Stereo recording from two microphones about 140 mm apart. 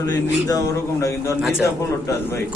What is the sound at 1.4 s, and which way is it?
Speech, 5° right (ahead or behind).